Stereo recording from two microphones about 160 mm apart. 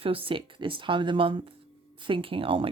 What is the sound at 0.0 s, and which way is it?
Speech, 35° right (ahead or behind).